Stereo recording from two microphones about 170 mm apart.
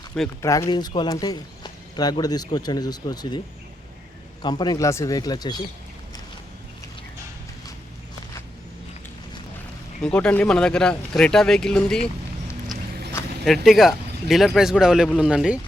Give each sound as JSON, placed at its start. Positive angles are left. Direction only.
{"t": 0.4, "sound": "speech", "side_deg": 20}
{"t": 4.4, "sound": "speech", "side_deg": 25}
{"t": 10.0, "sound": "speech", "side_deg": 5}
{"t": 13.4, "sound": "speech", "side_deg": 0}